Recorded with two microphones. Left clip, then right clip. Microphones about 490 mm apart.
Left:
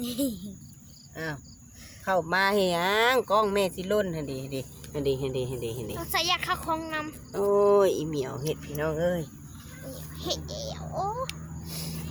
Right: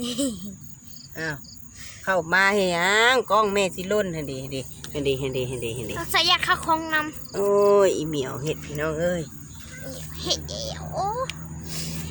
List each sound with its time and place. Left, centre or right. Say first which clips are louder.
0.0 s cricket: right 3 dB; left
2.0 s speech: right 4 dB; left
11.3 s vehicle: right 4 dB; left